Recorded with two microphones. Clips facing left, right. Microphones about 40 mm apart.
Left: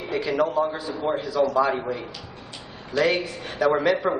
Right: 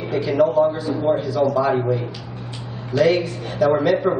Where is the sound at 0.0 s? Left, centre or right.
Centre.